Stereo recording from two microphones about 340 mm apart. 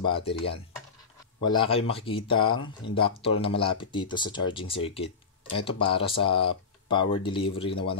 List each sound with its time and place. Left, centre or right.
0.0 s speech: centre
1.4 s speech: centre